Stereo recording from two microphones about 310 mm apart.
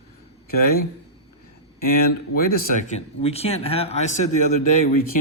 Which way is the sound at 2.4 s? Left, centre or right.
Left.